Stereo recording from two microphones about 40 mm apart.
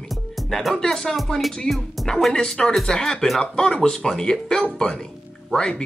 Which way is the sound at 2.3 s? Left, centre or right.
Centre.